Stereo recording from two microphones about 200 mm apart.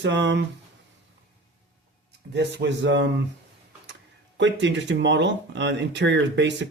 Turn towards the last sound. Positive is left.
turn(degrees=-60)  # may be behind; listen again after turning